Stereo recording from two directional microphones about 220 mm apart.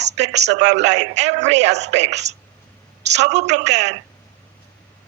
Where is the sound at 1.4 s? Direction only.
30° right (ahead or behind).